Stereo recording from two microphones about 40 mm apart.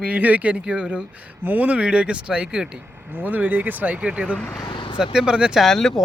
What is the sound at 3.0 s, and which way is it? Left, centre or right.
Speech, right.